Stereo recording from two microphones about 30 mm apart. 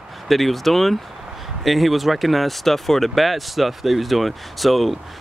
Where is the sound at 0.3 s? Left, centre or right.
Centre.